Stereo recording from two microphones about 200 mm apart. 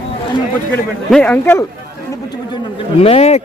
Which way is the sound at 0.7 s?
5° left (ahead or behind).